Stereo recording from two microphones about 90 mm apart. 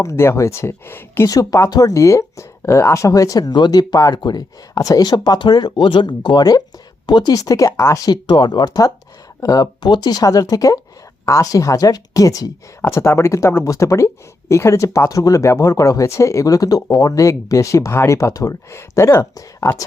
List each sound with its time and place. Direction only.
0.0 s speech: 30° left (ahead or behind)
1.3 s speech: 40° left (ahead or behind)